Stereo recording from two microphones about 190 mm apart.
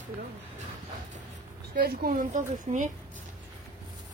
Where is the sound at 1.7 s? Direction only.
50° right (ahead or behind).